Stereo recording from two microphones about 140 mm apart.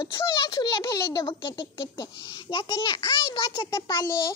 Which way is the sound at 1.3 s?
35° left (ahead or behind).